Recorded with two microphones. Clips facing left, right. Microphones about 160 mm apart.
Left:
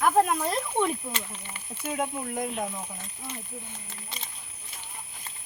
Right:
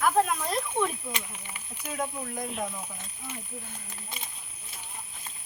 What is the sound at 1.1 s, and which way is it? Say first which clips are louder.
Speech: left 1 dB; 10° right (ahead or behind).